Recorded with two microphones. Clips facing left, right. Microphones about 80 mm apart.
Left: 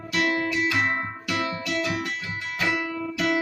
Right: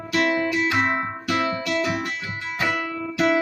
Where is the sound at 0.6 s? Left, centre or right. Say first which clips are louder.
Right 3 dB; right.